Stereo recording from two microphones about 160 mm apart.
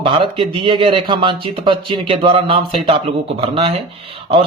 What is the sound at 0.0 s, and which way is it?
Speech, 35° right (ahead or behind).